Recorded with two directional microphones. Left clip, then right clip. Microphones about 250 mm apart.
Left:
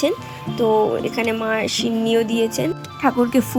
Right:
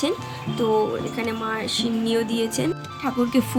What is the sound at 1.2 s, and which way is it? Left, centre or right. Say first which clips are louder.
Speech: left 6 dB; centre.